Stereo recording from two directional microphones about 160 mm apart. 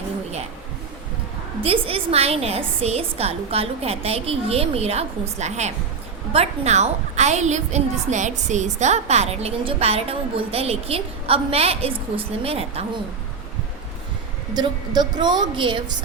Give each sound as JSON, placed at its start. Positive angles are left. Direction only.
{"t": 1.6, "sound": "a woman's voice", "side_deg": -35}
{"t": 14.5, "sound": "a woman's voice", "side_deg": -25}